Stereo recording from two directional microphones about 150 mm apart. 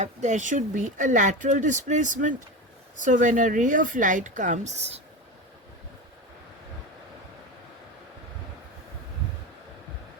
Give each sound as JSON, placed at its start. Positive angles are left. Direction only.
{"t": 0.0, "sound": "speech", "side_deg": -50}